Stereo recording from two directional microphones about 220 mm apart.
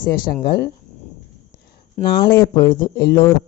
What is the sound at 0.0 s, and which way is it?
Speech, 45° left (ahead or behind).